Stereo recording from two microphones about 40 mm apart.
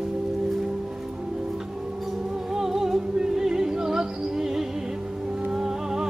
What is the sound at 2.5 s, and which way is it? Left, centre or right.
Music, centre.